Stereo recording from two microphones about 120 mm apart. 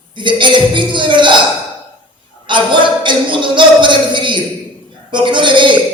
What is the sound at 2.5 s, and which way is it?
A man's voice, 40° right (ahead or behind).